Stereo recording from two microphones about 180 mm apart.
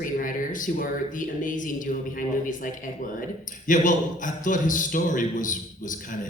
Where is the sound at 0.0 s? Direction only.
50° left (ahead or behind).